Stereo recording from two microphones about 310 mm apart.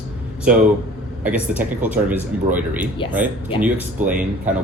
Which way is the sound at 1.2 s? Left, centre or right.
Centre.